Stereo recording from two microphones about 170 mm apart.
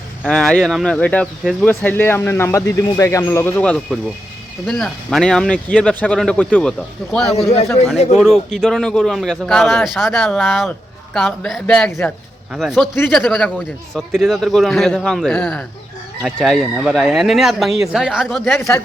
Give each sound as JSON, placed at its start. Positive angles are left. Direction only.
{"t": 0.3, "sound": "speech", "side_deg": 0}